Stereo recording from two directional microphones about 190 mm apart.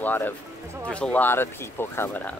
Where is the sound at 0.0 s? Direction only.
10° left (ahead or behind).